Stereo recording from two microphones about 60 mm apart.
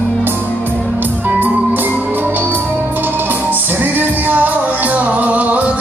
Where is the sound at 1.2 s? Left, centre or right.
Right.